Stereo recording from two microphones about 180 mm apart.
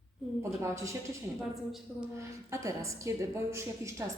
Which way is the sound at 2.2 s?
15° right (ahead or behind).